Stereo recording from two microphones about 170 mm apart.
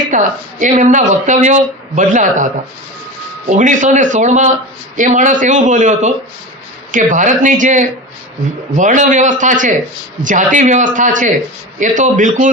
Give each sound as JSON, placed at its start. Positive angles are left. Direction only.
{"t": 0.1, "sound": "speech", "side_deg": -45}
{"t": 3.5, "sound": "speech", "side_deg": -45}